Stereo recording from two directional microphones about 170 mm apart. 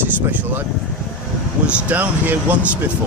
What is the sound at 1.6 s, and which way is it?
Speech, 10° right (ahead or behind).